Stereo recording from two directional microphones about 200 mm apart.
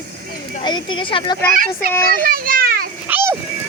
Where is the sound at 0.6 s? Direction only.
25° left (ahead or behind).